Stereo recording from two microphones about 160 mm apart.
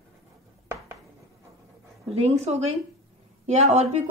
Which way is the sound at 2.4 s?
40° right (ahead or behind).